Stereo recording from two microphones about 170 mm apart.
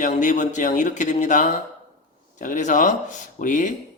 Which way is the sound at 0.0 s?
45° left (ahead or behind).